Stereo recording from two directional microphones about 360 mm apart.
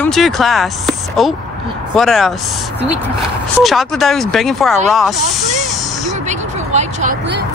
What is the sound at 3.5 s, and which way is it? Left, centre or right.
Speech, centre.